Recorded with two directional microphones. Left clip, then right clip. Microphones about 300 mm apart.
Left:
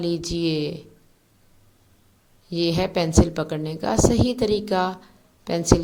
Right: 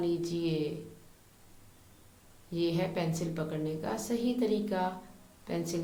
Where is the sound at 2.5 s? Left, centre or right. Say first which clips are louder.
Left 9 dB; left.